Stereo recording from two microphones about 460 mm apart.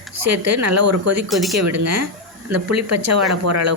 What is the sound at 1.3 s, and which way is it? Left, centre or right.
Speech, centre.